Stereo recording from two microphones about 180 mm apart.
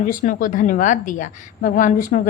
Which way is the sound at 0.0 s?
45° left (ahead or behind).